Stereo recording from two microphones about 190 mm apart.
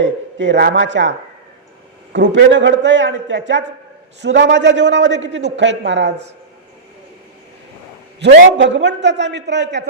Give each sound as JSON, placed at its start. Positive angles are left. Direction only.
{"t": 0.0, "sound": "speech", "side_deg": -75}
{"t": 2.1, "sound": "a man's voice", "side_deg": -70}
{"t": 8.2, "sound": "a man's voice", "side_deg": -60}